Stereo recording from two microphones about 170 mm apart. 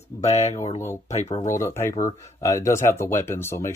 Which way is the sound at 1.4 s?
15° left (ahead or behind).